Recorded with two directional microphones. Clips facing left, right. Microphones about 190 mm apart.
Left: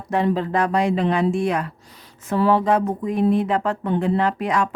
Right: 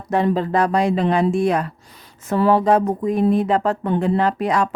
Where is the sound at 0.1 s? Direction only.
40° right (ahead or behind).